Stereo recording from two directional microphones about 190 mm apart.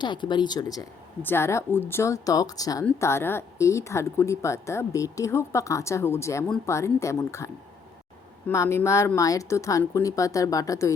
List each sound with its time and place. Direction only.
0.0 s a woman's voice: 25° left (ahead or behind)